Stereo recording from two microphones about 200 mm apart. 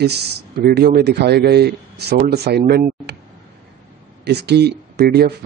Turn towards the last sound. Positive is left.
turn(degrees=-55)  # may be behind; listen again after turning